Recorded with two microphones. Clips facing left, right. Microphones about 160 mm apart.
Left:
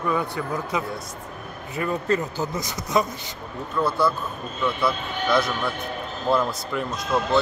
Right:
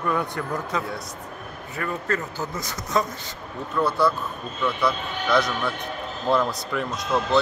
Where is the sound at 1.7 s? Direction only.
20° left (ahead or behind).